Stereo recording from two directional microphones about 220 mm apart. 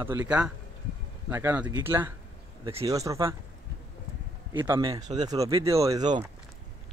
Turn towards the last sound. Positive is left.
turn(degrees=-20)  # may be behind; listen again after turning